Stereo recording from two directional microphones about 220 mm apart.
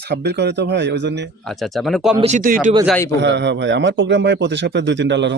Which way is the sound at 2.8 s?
5° left (ahead or behind).